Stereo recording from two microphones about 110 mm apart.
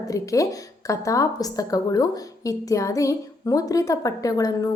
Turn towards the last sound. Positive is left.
turn(degrees=35)  # may be behind; listen again after turning